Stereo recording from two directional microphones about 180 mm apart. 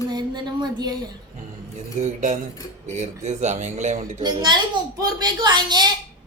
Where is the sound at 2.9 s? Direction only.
40° right (ahead or behind).